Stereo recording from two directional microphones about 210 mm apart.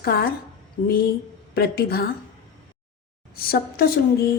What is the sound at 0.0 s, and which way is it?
A woman's voice, 50° left (ahead or behind).